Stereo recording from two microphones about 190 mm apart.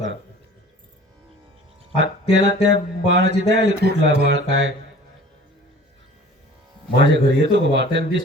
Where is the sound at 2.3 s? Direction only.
70° right (ahead or behind).